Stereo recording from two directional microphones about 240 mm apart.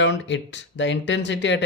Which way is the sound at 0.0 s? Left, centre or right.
Left.